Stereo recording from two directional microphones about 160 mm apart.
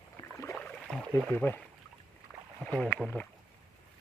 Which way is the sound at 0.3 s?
15° left (ahead or behind).